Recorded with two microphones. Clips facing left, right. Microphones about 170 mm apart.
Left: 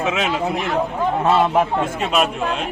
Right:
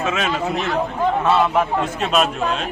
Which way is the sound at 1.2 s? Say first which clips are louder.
Left 3 dB; 30° left (ahead or behind).